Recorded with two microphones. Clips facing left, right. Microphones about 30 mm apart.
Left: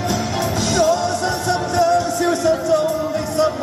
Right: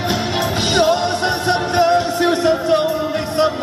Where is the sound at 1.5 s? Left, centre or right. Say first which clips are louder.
Right 2 dB; right.